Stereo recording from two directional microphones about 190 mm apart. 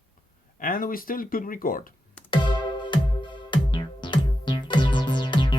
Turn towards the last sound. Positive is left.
turn(degrees=25)  # may be behind; listen again after turning